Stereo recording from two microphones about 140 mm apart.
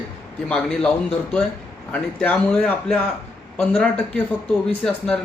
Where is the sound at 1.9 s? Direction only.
5° left (ahead or behind).